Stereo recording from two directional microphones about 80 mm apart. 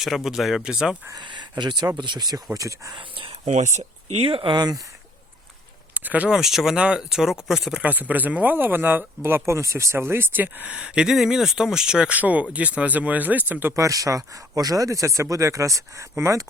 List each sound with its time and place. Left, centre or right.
0.0 s speech: centre
1.2 s speech: right
2.9 s speech: right
5.9 s speech: right
6.3 s speech: centre
7.8 s speech: centre
13.7 s speech: right